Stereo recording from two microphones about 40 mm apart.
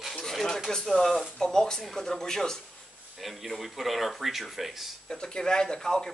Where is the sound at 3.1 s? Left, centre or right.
Centre.